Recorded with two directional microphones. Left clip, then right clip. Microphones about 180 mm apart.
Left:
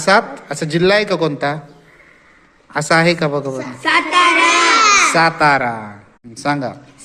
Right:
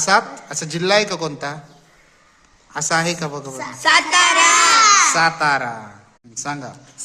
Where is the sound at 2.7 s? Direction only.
15° left (ahead or behind).